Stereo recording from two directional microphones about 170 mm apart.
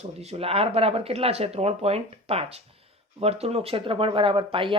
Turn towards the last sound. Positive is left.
turn(degrees=-30)  # may be behind; listen again after turning